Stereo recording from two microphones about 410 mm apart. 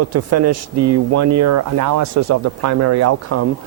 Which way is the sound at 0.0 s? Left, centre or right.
Right.